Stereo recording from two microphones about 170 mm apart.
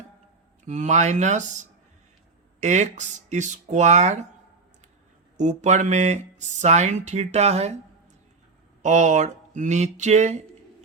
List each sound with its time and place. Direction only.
0.6 s speech: 45° right (ahead or behind)
5.4 s speech: 45° right (ahead or behind)
8.8 s speech: 45° right (ahead or behind)